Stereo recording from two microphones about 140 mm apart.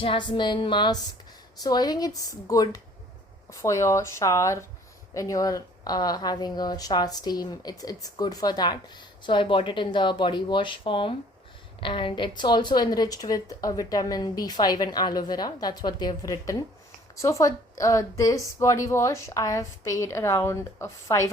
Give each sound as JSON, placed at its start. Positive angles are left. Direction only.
{"t": 0.0, "sound": "speech", "side_deg": 35}